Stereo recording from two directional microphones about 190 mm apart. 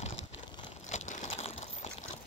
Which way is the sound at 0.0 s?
35° left (ahead or behind).